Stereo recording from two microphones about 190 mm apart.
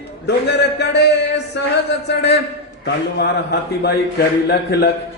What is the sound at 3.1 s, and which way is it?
Mantra, 60° left (ahead or behind).